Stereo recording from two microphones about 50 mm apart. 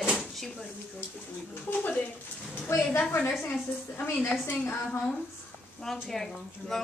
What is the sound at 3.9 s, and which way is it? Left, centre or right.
Speech, left.